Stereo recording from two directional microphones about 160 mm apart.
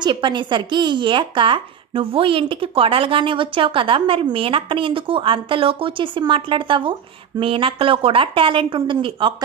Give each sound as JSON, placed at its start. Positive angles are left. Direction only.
{"t": 0.0, "sound": "speech", "side_deg": -30}